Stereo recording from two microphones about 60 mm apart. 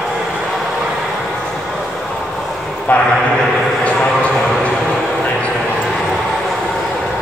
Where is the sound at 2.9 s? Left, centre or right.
Left.